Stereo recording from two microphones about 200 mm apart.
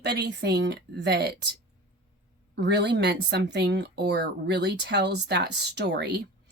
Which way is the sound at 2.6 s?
60° right (ahead or behind).